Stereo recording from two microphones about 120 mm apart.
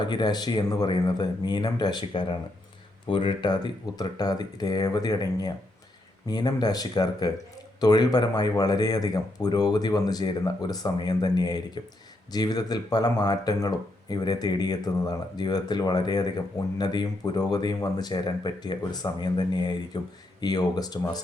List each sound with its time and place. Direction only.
0.0 s speech: 35° left (ahead or behind)